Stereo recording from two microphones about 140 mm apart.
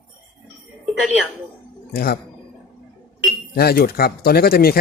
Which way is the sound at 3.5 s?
90° left.